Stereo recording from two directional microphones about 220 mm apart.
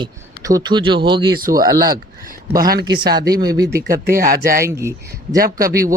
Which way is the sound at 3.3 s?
45° right (ahead or behind).